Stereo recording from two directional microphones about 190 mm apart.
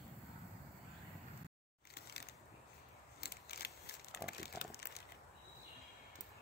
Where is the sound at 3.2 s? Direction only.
55° left (ahead or behind).